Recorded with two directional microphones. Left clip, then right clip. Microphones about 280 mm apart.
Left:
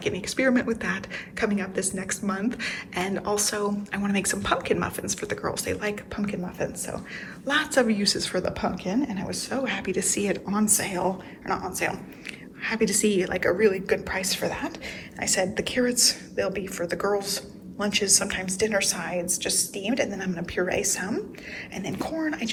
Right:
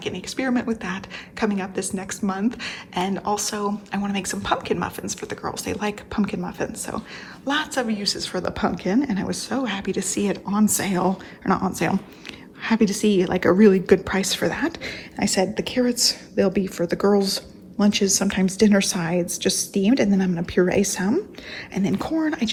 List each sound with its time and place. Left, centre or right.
0.0 s a woman's voice: centre